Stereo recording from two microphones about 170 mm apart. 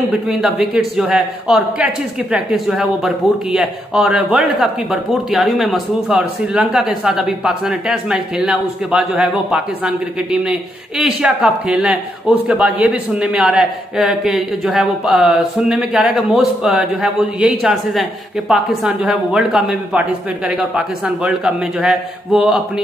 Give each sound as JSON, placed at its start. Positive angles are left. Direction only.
{"t": 0.1, "sound": "a man's voice", "side_deg": -5}